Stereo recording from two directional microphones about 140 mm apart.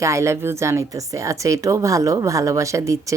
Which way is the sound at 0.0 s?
20° right (ahead or behind).